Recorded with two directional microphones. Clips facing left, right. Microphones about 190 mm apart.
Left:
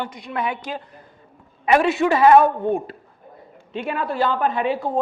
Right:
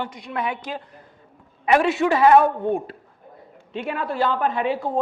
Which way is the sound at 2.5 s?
30° left (ahead or behind).